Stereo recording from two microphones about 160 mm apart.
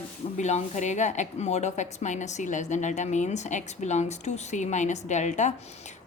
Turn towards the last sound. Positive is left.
turn(degrees=45)  # may be behind; listen again after turning